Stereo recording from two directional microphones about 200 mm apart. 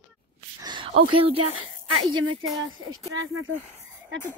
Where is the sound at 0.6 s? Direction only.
25° right (ahead or behind).